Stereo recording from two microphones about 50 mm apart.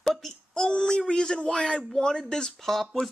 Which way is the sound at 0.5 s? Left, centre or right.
Centre.